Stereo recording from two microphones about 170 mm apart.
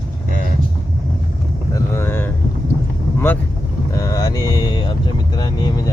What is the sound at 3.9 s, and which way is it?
Music, 20° left (ahead or behind).